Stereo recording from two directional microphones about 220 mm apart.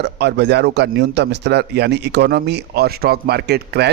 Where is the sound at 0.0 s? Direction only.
50° right (ahead or behind).